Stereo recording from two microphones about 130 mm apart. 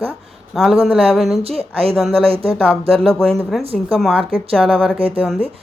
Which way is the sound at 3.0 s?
5° left (ahead or behind).